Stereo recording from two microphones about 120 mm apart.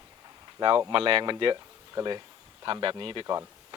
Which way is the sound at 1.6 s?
25° right (ahead or behind).